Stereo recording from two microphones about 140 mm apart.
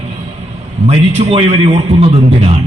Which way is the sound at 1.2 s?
50° right (ahead or behind).